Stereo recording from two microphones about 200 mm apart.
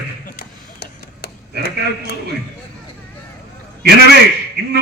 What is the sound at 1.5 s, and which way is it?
Speech, 55° right (ahead or behind).